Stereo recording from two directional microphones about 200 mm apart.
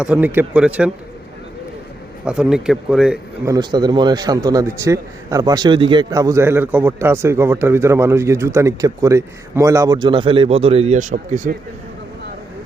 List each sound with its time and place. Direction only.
0.0 s a man's voice: 5° right (ahead or behind)
2.2 s a man's voice: 5° right (ahead or behind)
3.4 s a man's voice: 20° right (ahead or behind); by 11.5 s 40° right (ahead or behind)